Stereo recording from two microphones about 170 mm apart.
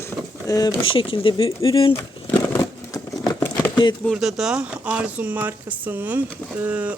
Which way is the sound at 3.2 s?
25° left (ahead or behind).